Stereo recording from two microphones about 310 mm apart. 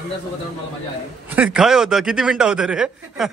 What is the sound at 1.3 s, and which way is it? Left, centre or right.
A man's voice, centre.